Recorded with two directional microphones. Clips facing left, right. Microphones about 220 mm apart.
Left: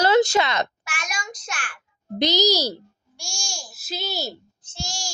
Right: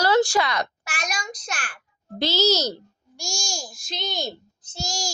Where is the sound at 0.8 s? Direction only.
35° right (ahead or behind).